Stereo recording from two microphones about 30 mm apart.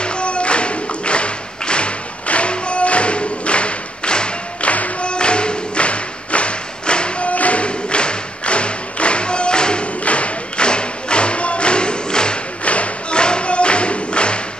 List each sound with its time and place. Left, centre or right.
0.0 s music: left
4.6 s music: left
5.0 s music: left
7.2 s music: left
10.0 s thump: left
10.7 s music: left
12.6 s thump: left
13.2 s music: left